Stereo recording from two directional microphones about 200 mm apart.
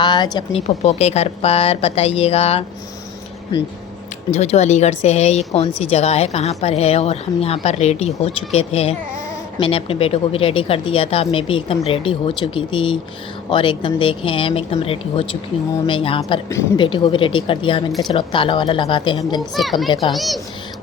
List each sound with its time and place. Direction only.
0.0 s a woman's voice: 20° left (ahead or behind)
4.3 s a woman's voice: 35° left (ahead or behind)
19.5 s a child's voice: centre (ahead or behind)
19.9 s a woman's voice: 25° left (ahead or behind)
20.1 s a child's voice: centre (ahead or behind)